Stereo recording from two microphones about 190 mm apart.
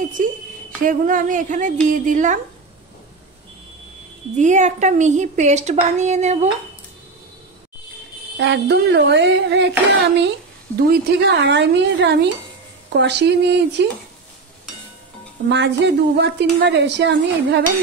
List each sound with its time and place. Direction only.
0.2 s speech: 45° right (ahead or behind)
4.4 s a woman's voice: 40° right (ahead or behind)
8.4 s a woman's voice: 65° right (ahead or behind)
15.4 s a woman's voice: 65° right (ahead or behind)